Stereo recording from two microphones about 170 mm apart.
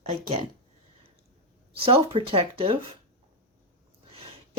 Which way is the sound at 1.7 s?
35° right (ahead or behind).